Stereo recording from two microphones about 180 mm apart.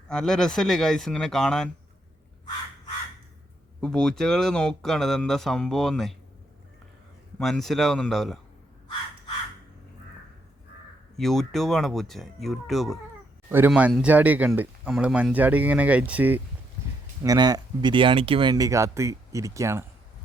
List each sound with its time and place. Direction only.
0.1 s speech: 5° left (ahead or behind)
3.8 s speech: 5° left (ahead or behind)
7.3 s speech: 5° left (ahead or behind)
11.2 s speech: centre (ahead or behind)
17.2 s speech: 20° right (ahead or behind)